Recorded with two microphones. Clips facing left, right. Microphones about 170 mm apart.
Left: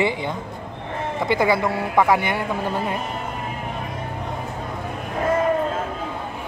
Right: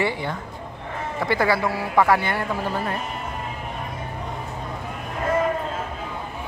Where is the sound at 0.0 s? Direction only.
20° left (ahead or behind).